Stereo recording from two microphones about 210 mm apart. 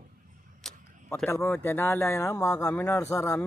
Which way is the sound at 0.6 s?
Centre (ahead or behind).